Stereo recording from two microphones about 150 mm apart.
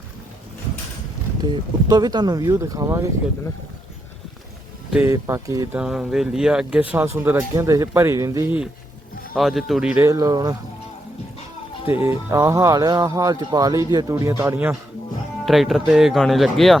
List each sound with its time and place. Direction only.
1.4 s speech: 25° right (ahead or behind)
5.0 s speech: 20° right (ahead or behind)
5.7 s speech: 5° right (ahead or behind); by 8.5 s 25° right (ahead or behind)
9.3 s speech: centre (ahead or behind)
10.0 s speech: 25° right (ahead or behind)
12.0 s speech: 20° right (ahead or behind)
15.4 s speech: centre (ahead or behind)